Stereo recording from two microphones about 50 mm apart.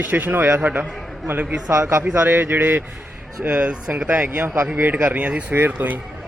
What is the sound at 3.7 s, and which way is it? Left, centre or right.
Speech, right.